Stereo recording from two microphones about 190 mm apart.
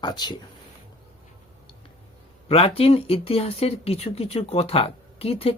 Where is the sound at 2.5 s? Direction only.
30° left (ahead or behind).